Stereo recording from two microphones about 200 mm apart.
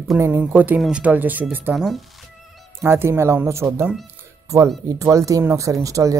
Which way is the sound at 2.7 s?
10° right (ahead or behind).